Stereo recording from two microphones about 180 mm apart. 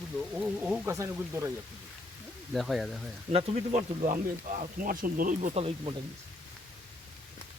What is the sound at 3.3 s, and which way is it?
Speech, 35° right (ahead or behind).